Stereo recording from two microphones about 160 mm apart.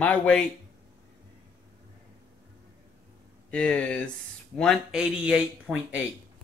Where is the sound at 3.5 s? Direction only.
5° left (ahead or behind).